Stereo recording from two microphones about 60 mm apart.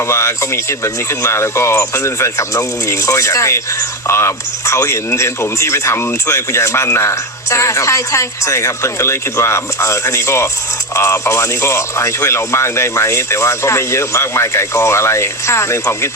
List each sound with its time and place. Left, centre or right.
0.1 s speech: left